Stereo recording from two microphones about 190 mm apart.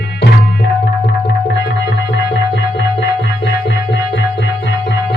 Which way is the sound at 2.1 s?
70° left (ahead or behind).